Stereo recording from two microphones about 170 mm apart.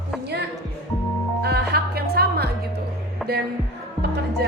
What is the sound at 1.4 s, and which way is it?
Music, 70° right (ahead or behind).